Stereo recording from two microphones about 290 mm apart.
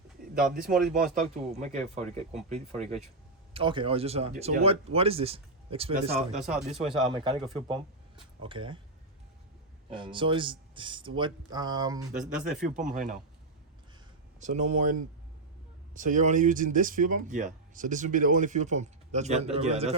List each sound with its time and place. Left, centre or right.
0.7 s speech: right
6.4 s speech: centre
7.1 s speech: centre
9.9 s speech: centre
12.1 s speech: centre
12.7 s speech: right
14.3 s speech: right
16.0 s speech: right